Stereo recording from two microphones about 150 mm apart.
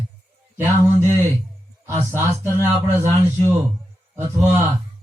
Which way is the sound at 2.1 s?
15° right (ahead or behind).